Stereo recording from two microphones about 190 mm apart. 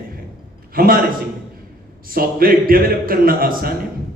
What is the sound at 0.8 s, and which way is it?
Speech, 50° right (ahead or behind).